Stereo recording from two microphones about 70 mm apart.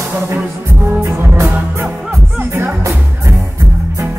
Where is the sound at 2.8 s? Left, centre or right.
Right.